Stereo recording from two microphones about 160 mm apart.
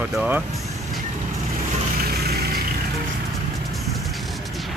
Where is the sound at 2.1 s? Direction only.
80° right.